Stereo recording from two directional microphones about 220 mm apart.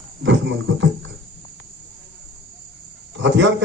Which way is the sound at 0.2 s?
55° right (ahead or behind).